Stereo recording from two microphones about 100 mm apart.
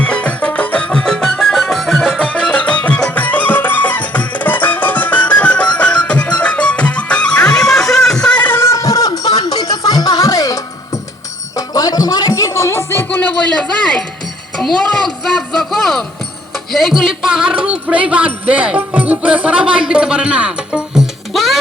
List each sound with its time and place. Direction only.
0.0 s music: 10° left (ahead or behind)
2.3 s music: 10° left (ahead or behind)
14.6 s a sound: 5° left (ahead or behind)
16.7 s music: centre (ahead or behind)